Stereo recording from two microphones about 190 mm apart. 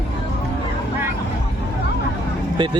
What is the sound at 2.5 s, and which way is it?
Speech, 25° right (ahead or behind).